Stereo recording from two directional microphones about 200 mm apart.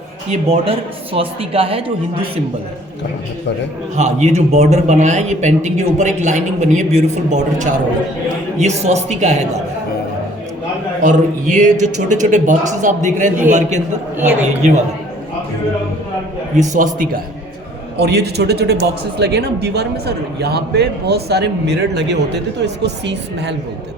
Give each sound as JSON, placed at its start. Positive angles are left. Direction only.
{"t": 0.3, "sound": "speech", "side_deg": -30}
{"t": 3.9, "sound": "a man's voice", "side_deg": -35}
{"t": 11.0, "sound": "a man's voice", "side_deg": -40}
{"t": 16.6, "sound": "a man's voice", "side_deg": -40}
{"t": 17.9, "sound": "a man's voice", "side_deg": -55}